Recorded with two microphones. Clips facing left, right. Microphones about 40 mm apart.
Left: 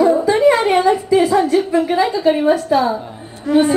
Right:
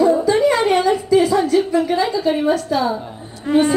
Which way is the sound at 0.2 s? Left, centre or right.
Left.